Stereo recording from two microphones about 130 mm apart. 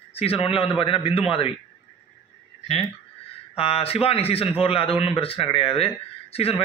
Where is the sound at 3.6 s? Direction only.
50° left (ahead or behind).